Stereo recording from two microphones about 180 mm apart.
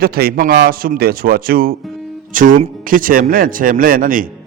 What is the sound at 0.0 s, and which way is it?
A man's voice, 55° right (ahead or behind).